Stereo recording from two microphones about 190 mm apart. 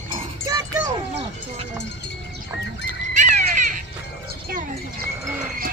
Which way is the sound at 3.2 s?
40° right (ahead or behind).